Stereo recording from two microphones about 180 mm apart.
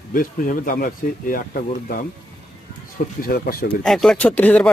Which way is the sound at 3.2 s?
55° left (ahead or behind).